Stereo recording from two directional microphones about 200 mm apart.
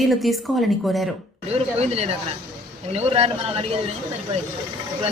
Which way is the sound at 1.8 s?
30° right (ahead or behind).